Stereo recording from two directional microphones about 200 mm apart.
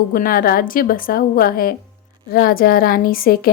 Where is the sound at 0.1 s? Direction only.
45° left (ahead or behind).